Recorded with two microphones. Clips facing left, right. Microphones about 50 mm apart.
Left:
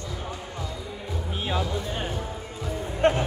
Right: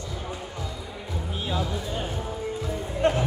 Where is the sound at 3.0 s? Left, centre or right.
Left.